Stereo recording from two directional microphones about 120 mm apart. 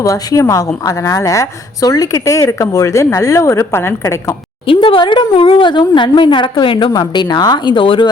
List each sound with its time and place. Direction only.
0.0 s a woman's voice: 25° left (ahead or behind)
4.6 s a woman's voice: 45° left (ahead or behind)